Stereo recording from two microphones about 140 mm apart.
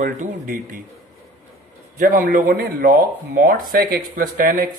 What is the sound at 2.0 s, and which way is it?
Speech, 85° right.